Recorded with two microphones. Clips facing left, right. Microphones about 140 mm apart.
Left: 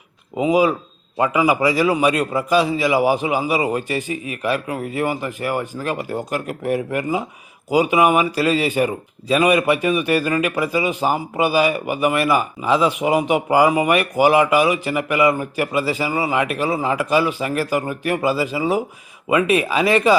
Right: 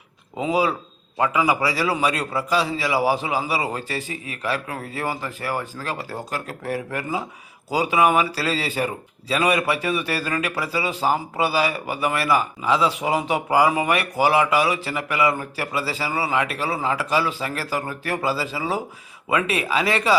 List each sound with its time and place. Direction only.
0.3 s speech: 15° left (ahead or behind)